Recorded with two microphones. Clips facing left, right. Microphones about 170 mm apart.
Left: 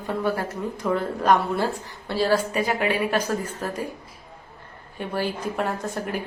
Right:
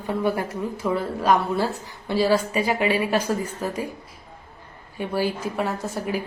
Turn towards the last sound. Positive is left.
turn(degrees=-5)  # may be behind; listen again after turning